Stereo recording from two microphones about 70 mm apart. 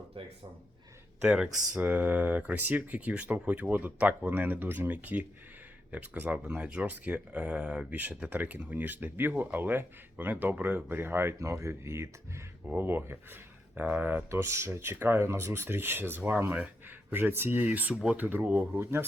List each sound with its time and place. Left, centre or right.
1.3 s speech: centre
1.8 s speech: right
11.3 s speech: right
12.6 s speech: right
14.4 s speech: right
17.7 s speech: centre
18.8 s speech: right